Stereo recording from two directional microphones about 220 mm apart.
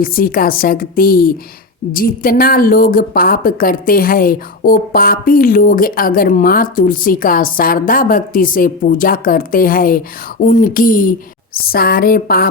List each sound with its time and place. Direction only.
0.0 s a woman's voice: 40° left (ahead or behind)